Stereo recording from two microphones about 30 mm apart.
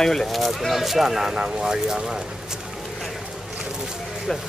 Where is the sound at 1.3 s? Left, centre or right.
Right.